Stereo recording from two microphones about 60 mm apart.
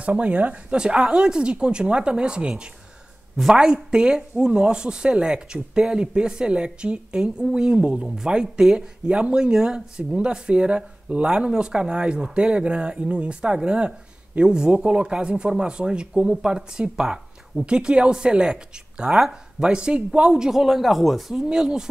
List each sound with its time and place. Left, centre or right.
0.0 s speech: right